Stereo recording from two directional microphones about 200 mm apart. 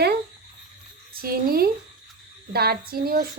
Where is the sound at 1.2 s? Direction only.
50° right (ahead or behind).